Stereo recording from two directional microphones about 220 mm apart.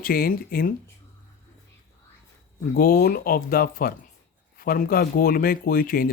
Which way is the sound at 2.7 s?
45° left (ahead or behind).